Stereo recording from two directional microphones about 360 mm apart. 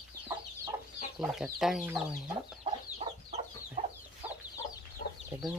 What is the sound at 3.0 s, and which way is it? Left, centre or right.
Chicken, centre.